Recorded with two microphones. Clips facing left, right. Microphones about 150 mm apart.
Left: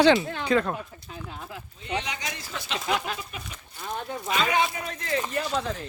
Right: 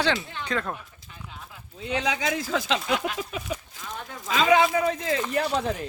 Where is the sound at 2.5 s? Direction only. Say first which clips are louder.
Right 10 dB; 90° right.